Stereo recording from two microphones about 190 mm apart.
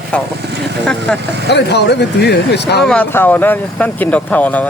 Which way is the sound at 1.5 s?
60° left (ahead or behind).